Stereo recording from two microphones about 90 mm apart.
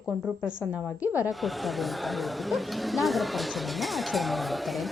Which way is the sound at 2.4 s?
Centre (ahead or behind).